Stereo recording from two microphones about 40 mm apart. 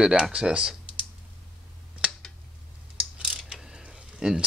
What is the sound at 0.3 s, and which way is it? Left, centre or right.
Speech, right.